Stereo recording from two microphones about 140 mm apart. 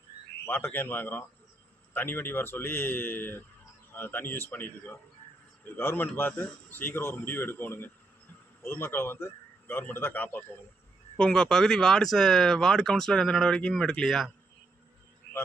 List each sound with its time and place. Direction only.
0.4 s speech: 15° left (ahead or behind)